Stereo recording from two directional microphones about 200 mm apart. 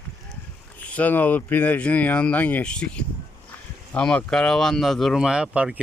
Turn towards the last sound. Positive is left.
turn(degrees=-5)  # may be behind; listen again after turning